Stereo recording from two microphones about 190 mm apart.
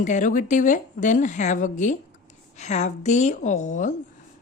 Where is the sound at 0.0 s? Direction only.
40° left (ahead or behind).